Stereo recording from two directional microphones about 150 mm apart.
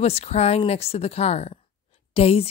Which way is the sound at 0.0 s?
45° left (ahead or behind).